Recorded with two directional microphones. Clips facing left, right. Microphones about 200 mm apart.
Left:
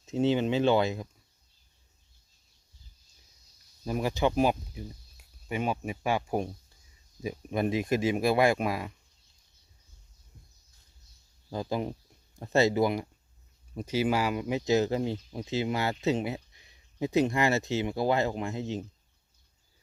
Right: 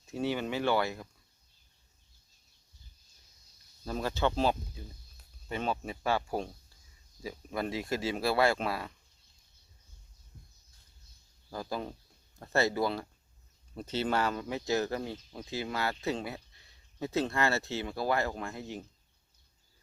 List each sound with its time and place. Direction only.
0.0 s speech: 20° left (ahead or behind)
3.8 s speech: 15° left (ahead or behind)
11.5 s speech: 20° left (ahead or behind)